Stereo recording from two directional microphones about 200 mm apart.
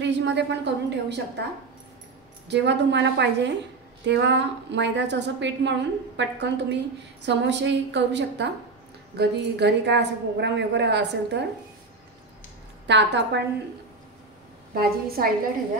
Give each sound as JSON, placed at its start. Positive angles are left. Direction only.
{"t": 0.0, "sound": "a woman's voice", "side_deg": -60}
{"t": 2.4, "sound": "a woman's voice", "side_deg": -60}
{"t": 12.8, "sound": "a woman's voice", "side_deg": -60}
{"t": 14.7, "sound": "a woman's voice", "side_deg": -50}